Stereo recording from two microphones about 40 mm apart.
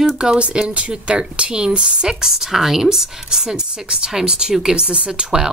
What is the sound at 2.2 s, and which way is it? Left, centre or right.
A woman's voice, centre.